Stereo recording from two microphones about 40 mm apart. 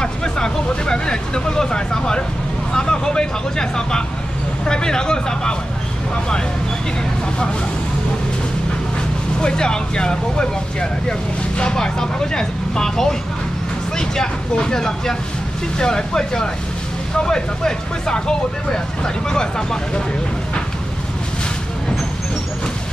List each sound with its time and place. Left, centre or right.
0.0 s speech: centre
9.4 s speech: centre